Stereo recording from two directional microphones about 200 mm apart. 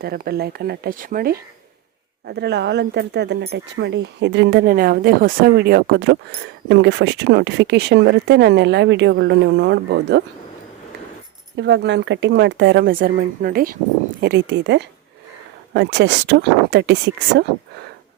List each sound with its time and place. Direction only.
0.0 s speech: 50° right (ahead or behind)
11.5 s speech: 60° right (ahead or behind)
14.2 s speech: 60° right (ahead or behind)